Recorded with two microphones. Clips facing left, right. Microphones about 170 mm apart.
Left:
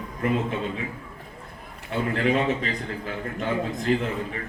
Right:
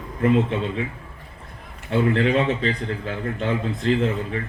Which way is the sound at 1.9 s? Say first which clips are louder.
Right 4 dB; 30° right (ahead or behind).